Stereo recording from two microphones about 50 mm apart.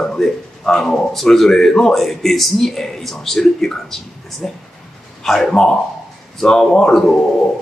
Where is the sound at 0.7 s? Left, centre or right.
Centre.